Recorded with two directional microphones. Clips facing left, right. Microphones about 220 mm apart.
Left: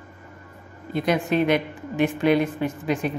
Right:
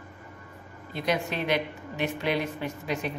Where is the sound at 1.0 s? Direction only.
50° left (ahead or behind).